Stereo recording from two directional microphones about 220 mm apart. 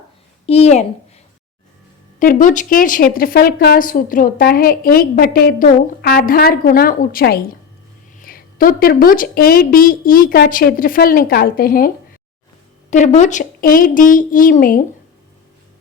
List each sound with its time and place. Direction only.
0.4 s a woman's voice: 30° left (ahead or behind)
2.1 s a woman's voice: 35° left (ahead or behind)
12.9 s a woman's voice: 35° left (ahead or behind)